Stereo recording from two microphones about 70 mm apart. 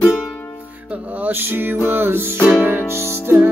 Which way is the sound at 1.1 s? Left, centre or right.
Right.